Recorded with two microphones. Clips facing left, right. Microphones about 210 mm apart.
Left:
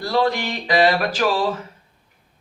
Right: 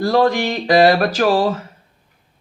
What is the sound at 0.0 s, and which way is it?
Music, 45° right (ahead or behind).